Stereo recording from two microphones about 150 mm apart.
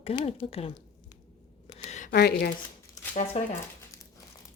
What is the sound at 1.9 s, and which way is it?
Speech, 55° left (ahead or behind).